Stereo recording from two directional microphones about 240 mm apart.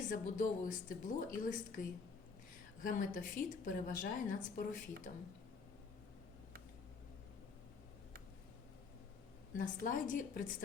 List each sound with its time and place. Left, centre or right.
0.1 s a woman's voice: left
9.6 s a woman's voice: left